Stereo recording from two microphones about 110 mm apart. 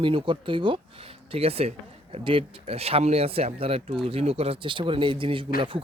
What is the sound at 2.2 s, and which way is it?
Speech, 55° right (ahead or behind).